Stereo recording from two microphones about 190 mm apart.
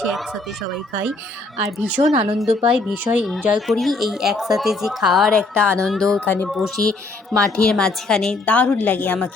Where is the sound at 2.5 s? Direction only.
5° right (ahead or behind).